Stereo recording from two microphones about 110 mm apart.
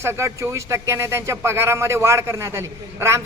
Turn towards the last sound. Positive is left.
turn(degrees=-25)  # may be behind; listen again after turning